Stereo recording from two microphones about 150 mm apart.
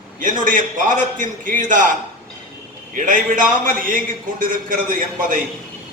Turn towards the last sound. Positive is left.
turn(degrees=-60)  # may be behind; listen again after turning